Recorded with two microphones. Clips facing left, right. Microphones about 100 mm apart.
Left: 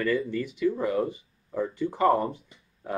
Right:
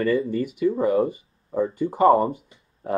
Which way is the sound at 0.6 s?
45° right (ahead or behind).